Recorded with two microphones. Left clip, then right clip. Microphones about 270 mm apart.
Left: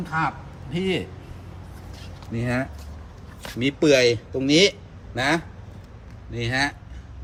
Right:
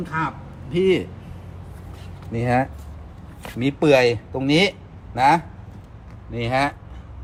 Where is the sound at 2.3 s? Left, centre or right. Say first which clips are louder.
Right 6 dB; centre.